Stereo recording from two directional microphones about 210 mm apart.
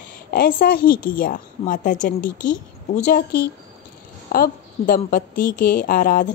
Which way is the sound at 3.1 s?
45° left (ahead or behind).